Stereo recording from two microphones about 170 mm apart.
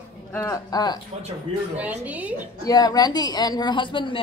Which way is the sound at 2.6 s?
20° left (ahead or behind).